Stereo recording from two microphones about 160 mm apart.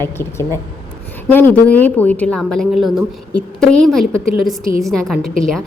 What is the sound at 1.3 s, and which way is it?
A woman's voice, 10° left (ahead or behind).